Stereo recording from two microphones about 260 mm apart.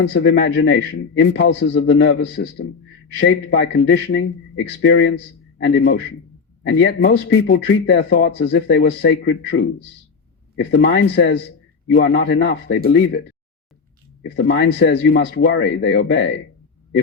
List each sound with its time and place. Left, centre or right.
0.0 s a man's voice: left
10.6 s a man's voice: left
14.2 s a man's voice: left